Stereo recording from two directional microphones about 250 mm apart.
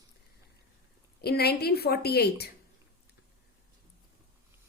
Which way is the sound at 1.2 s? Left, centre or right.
Left.